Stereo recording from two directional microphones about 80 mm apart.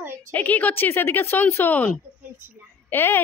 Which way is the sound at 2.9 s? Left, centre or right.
Left.